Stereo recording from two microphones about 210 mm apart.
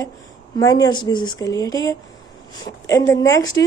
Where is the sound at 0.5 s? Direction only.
15° left (ahead or behind).